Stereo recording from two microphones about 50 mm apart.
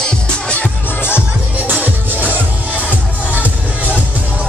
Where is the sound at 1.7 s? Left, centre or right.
Right.